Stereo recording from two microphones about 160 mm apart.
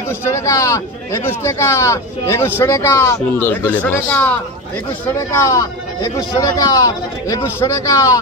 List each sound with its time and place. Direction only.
0.4 s speech: 20° left (ahead or behind)